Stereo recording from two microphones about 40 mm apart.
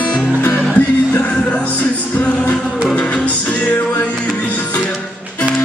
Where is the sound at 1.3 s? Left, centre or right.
Left.